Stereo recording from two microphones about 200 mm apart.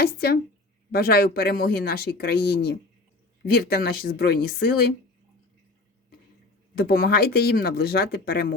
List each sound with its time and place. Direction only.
0.0 s speech: 50° left (ahead or behind)
6.7 s speech: 50° left (ahead or behind)